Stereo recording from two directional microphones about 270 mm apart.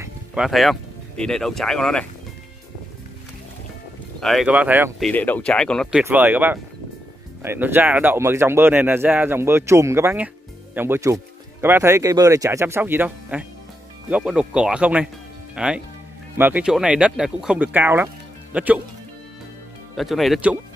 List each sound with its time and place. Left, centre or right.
0.0 s speech: centre
4.2 s speech: centre
20.0 s speech: centre